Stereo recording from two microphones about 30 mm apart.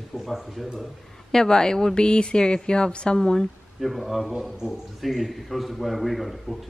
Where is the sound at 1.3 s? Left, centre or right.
Left.